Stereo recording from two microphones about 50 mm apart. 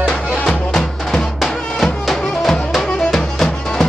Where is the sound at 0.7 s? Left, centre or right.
Centre.